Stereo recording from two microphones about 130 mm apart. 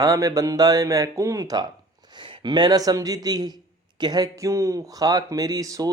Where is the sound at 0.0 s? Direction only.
25° right (ahead or behind).